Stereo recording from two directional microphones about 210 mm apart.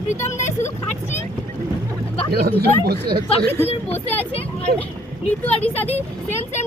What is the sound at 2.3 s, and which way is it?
Speech, 50° right (ahead or behind).